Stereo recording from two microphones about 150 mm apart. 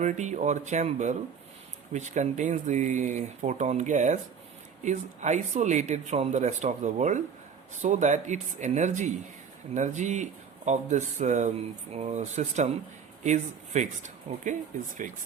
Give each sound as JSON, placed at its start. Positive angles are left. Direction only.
{"t": 0.0, "sound": "speech", "side_deg": -55}